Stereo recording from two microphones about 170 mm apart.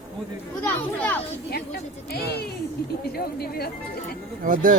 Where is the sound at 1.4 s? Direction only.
70° left (ahead or behind).